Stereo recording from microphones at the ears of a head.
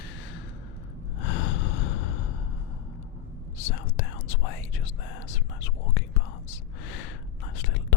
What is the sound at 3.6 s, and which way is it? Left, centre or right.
Whispering, left.